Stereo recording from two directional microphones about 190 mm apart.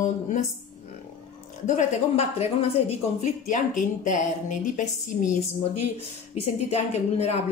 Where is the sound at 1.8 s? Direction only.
35° left (ahead or behind).